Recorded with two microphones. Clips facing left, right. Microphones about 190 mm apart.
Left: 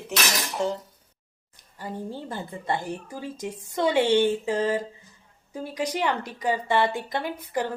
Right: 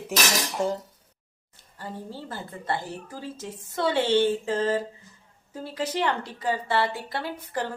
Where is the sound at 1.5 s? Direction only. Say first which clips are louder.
Left 3 dB; 15° left (ahead or behind).